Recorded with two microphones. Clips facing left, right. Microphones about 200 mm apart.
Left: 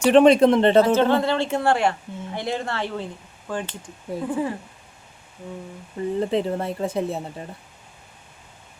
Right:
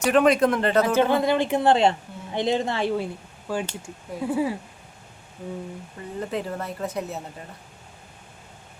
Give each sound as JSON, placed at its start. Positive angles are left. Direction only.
{"t": 0.0, "sound": "speech", "side_deg": 30}
{"t": 0.9, "sound": "a woman's voice", "side_deg": -15}
{"t": 6.1, "sound": "speech", "side_deg": 25}